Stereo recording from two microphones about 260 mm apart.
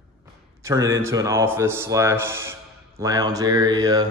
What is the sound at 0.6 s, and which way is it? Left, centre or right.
A man's voice, centre.